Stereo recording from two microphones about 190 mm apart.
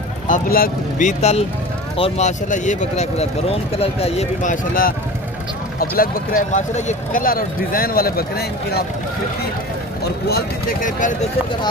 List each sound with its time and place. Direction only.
0.3 s speech: 45° left (ahead or behind)